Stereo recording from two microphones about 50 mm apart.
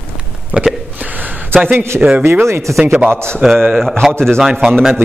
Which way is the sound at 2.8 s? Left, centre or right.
Centre.